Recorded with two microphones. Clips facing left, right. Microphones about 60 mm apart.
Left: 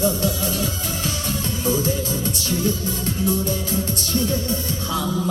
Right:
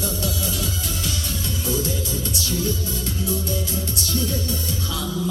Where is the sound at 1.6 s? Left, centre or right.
Left.